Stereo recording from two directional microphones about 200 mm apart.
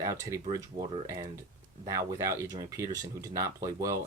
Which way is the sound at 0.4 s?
30° right (ahead or behind).